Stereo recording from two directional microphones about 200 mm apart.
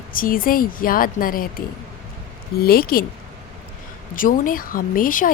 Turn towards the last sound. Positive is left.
turn(degrees=45)  # may be behind; listen again after turning